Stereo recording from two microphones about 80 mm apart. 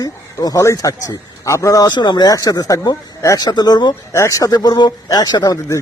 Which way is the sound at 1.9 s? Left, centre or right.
Left.